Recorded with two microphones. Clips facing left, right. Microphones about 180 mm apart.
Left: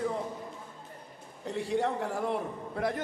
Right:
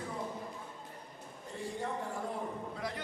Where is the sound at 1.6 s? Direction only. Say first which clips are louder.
Left 8 dB; 75° left (ahead or behind).